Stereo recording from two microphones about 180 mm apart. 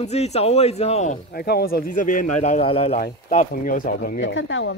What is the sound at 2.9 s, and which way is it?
Speech, 45° left (ahead or behind).